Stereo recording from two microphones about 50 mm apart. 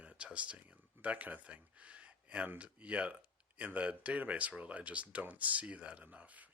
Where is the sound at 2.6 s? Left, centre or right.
Right.